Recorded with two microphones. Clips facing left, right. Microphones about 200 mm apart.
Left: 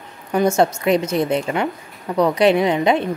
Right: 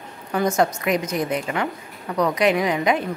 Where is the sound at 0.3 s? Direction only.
25° left (ahead or behind).